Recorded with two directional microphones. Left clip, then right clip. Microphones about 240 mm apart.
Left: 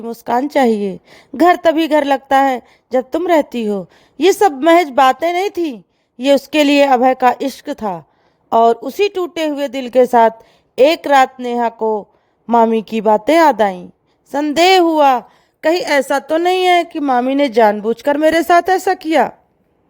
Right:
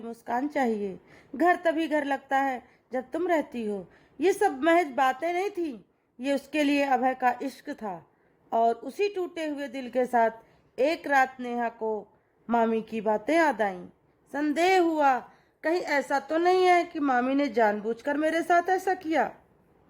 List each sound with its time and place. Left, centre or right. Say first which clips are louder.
0.0 s a woman's voice: left 13 dB; left
16.5 s a woman's voice: left 8 dB; centre
16.9 s a woman's voice: left 11 dB; left